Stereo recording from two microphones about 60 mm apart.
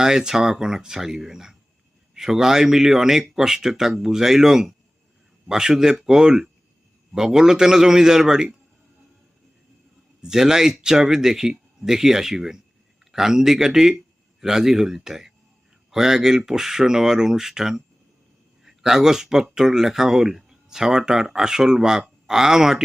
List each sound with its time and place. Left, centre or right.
0.0 s speech: centre
10.2 s speech: centre